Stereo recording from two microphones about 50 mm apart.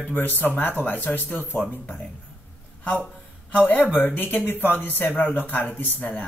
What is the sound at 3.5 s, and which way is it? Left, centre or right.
Speech, left.